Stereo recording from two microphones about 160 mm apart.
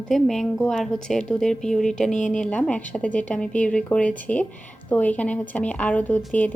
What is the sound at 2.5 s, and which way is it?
Speech, 10° left (ahead or behind).